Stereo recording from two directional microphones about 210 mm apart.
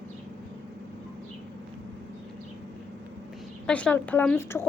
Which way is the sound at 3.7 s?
5° left (ahead or behind).